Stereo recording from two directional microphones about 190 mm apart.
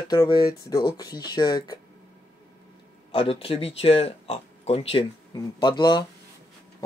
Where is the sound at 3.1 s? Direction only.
30° left (ahead or behind).